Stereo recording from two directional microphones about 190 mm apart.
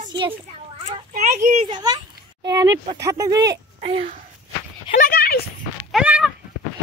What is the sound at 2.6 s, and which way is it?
Speech, 20° right (ahead or behind).